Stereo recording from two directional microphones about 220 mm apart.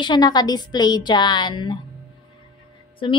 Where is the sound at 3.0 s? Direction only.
20° left (ahead or behind).